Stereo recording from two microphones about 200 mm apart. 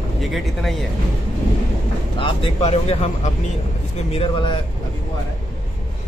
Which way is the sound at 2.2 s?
30° left (ahead or behind).